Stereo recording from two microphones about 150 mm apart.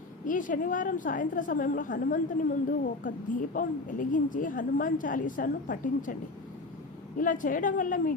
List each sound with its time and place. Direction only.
0.3 s a woman's voice: 60° left (ahead or behind)
7.2 s a woman's voice: 60° left (ahead or behind)